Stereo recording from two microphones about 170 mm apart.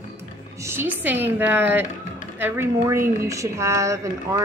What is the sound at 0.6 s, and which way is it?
A woman's voice, 15° right (ahead or behind).